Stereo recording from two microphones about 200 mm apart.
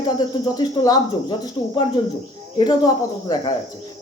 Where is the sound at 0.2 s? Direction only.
20° left (ahead or behind).